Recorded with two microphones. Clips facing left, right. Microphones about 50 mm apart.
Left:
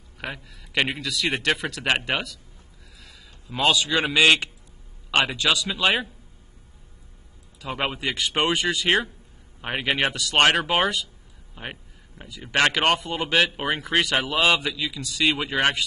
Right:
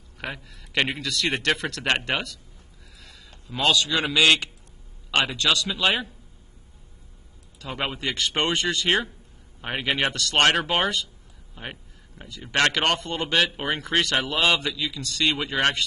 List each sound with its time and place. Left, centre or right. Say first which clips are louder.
0.2 s a man's voice: even; centre
3.4 s a man's voice: left 1 dB; centre
5.1 s speech: left 1 dB; centre
7.6 s speech: left 2 dB; centre